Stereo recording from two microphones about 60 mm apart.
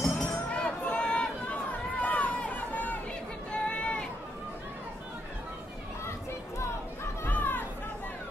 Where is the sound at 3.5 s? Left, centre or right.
Centre.